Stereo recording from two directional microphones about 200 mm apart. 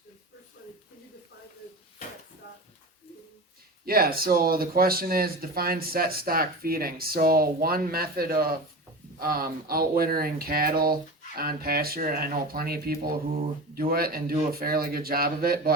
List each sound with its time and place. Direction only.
3.8 s speech: 50° right (ahead or behind)